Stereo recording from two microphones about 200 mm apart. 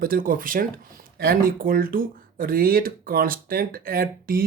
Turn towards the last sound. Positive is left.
turn(degrees=-45)  # may be behind; listen again after turning